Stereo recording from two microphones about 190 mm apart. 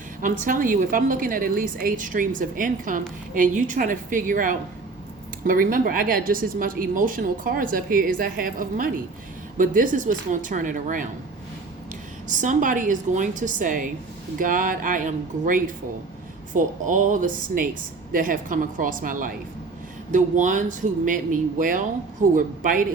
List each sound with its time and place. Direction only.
0.4 s a woman's voice: 45° right (ahead or behind)
12.3 s a woman's voice: 40° right (ahead or behind)